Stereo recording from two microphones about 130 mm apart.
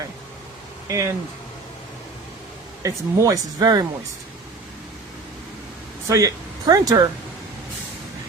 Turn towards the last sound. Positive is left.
turn(degrees=-25)  # may be behind; listen again after turning